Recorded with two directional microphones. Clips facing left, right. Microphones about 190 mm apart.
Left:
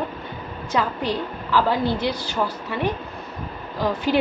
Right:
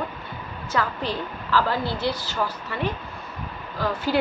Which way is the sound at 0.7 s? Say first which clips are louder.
Left 3 dB; 15° left (ahead or behind).